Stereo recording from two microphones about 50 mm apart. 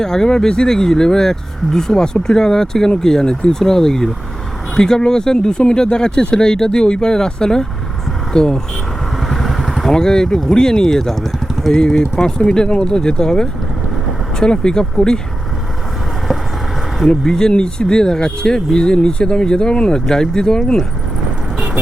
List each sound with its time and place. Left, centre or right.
0.0 s speech: centre
9.2 s vehicle: centre
9.9 s speech: centre
11.7 s speech: centre
17.1 s speech: centre